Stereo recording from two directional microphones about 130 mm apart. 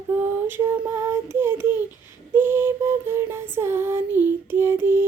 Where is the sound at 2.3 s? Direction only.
20° right (ahead or behind).